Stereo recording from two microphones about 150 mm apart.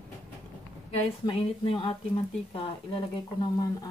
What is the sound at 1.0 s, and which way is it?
Speech, 40° left (ahead or behind).